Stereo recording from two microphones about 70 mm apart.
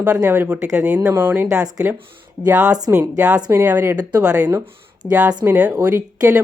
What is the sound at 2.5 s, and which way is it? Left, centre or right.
Speech, centre.